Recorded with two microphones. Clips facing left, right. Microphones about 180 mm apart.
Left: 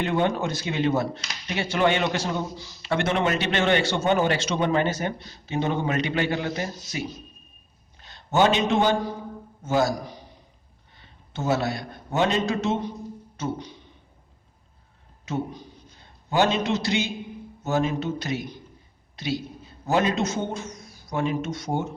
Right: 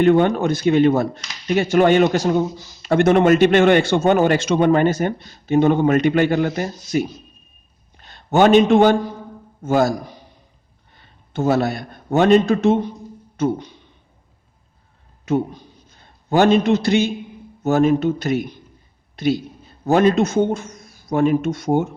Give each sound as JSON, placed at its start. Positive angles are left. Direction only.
{"t": 0.0, "sound": "speech", "side_deg": -55}
{"t": 8.0, "sound": "a man's voice", "side_deg": -55}
{"t": 10.9, "sound": "a man's voice", "side_deg": -55}
{"t": 16.3, "sound": "a man's voice", "side_deg": -55}